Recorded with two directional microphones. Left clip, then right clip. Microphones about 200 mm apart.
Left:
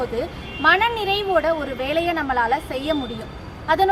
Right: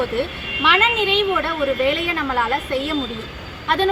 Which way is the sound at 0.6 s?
20° left (ahead or behind).